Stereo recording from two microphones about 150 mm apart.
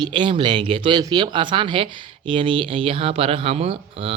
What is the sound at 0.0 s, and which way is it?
Speech, 30° right (ahead or behind).